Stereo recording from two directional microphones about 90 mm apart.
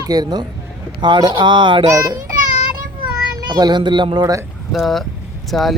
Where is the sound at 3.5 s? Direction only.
50° right (ahead or behind).